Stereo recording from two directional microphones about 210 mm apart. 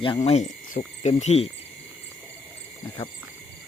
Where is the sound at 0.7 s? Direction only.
35° left (ahead or behind).